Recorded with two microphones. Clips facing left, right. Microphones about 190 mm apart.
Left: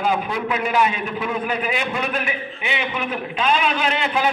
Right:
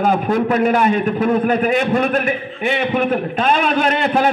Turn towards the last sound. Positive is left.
turn(degrees=-50)  # may be behind; listen again after turning